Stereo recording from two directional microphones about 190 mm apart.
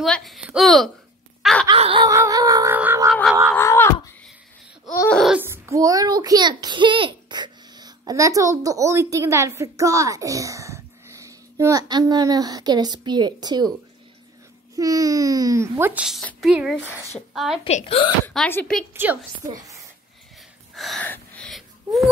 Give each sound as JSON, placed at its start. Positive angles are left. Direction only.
{"t": 0.0, "sound": "speech", "side_deg": 0}
{"t": 1.4, "sound": "a sound", "side_deg": 5}
{"t": 1.7, "sound": "snicker", "side_deg": -25}
{"t": 2.0, "sound": "music", "side_deg": -15}
{"t": 3.1, "sound": "cat", "side_deg": 0}
{"t": 3.5, "sound": "a sound", "side_deg": 10}
{"t": 4.9, "sound": "laughter", "side_deg": 15}
{"t": 5.2, "sound": "a child's voice", "side_deg": -10}
{"t": 14.8, "sound": "a child's voice", "side_deg": -20}
{"t": 17.6, "sound": "speech", "side_deg": 35}
{"t": 18.2, "sound": "speech", "side_deg": 5}
{"t": 20.7, "sound": "gasp", "side_deg": 0}